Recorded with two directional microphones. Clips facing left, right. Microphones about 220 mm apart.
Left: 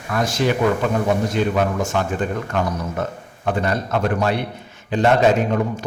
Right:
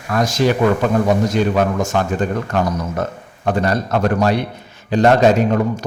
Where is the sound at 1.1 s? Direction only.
40° right (ahead or behind).